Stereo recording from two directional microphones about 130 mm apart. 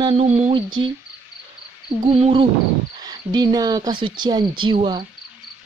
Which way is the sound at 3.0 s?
30° right (ahead or behind).